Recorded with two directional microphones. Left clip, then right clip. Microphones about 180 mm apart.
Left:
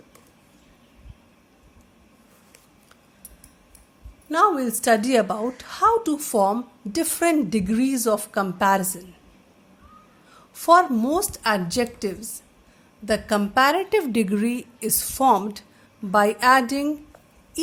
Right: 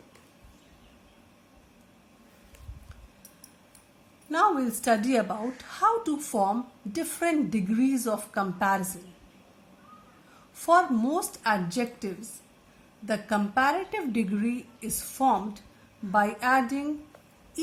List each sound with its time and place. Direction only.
4.3 s a woman's voice: 35° left (ahead or behind)
10.5 s a woman's voice: 35° left (ahead or behind)